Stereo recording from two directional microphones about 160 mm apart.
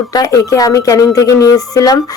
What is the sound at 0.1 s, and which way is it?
A man's voice, 20° left (ahead or behind).